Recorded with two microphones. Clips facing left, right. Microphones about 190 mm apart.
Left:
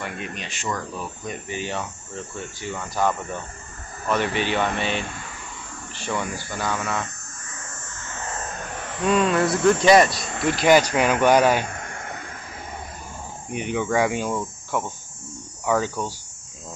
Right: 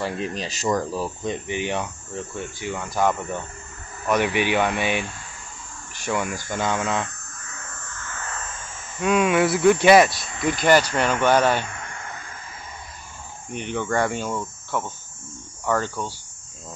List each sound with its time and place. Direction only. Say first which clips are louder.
0.0 s speech: right 5 dB; 35° right (ahead or behind)
8.3 s vehicle: left 5 dB; 40° left (ahead or behind)
8.5 s a sound: left 7 dB; 65° left (ahead or behind)
9.0 s speech: right 1 dB; 5° right (ahead or behind)
10.6 s speech: left 2 dB; 10° left (ahead or behind)
11.6 s a sound: left 2 dB; 45° left (ahead or behind); by 12.3 s 60° left (ahead or behind)
13.5 s speech: left 2 dB; 5° left (ahead or behind)